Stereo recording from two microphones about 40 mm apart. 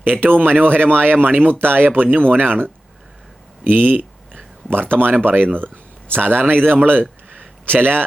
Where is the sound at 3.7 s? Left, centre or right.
Right.